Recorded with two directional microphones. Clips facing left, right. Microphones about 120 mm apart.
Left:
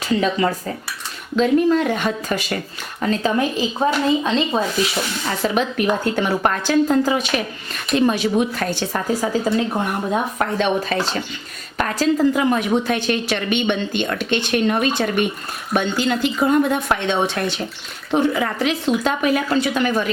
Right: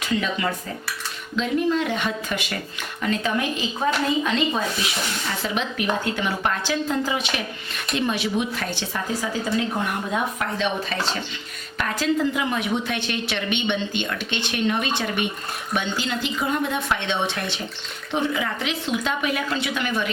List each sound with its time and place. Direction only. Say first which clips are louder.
1.4 s a woman's voice: left 6 dB; 45° left (ahead or behind); by 4.6 s 30° left (ahead or behind)
5.4 s a woman's voice: left 8 dB; 45° left (ahead or behind)